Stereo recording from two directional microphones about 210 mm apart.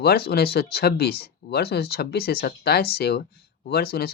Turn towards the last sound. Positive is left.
turn(degrees=45)  # may be behind; listen again after turning